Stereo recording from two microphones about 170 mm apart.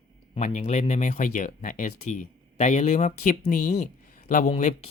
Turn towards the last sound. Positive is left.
turn(degrees=35)  # may be behind; listen again after turning